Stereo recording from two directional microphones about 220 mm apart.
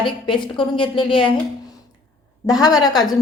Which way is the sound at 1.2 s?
5° left (ahead or behind).